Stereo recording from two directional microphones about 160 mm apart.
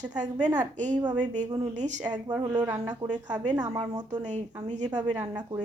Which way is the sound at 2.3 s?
10° right (ahead or behind).